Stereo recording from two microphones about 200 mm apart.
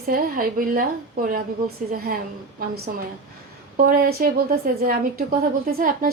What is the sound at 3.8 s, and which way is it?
Speech, 45° right (ahead or behind).